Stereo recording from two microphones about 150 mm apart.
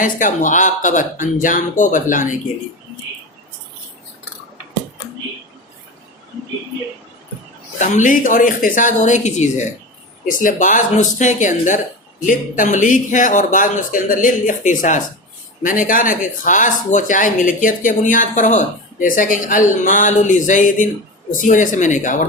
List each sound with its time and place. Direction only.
0.0 s speech: 60° left (ahead or behind)
7.8 s speech: 55° left (ahead or behind)
10.2 s speech: 60° left (ahead or behind)